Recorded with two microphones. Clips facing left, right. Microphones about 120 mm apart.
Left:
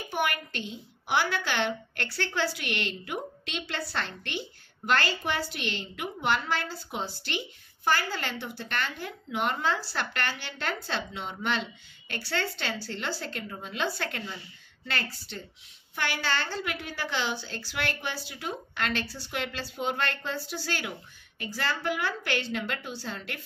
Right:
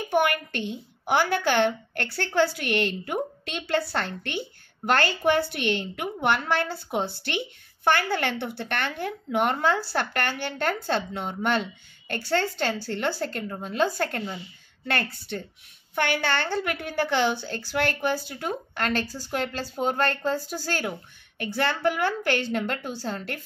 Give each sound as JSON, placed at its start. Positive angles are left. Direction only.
{"t": 0.1, "sound": "a woman's voice", "side_deg": -55}